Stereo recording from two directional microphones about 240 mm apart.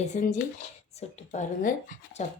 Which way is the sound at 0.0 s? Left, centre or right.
Left.